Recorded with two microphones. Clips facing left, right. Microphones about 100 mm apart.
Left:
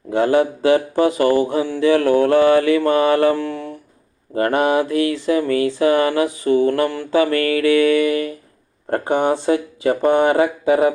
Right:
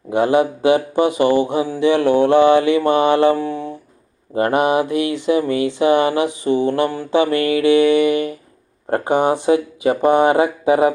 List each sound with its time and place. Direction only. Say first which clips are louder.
0.1 s mantra: right 1 dB; 20° right (ahead or behind)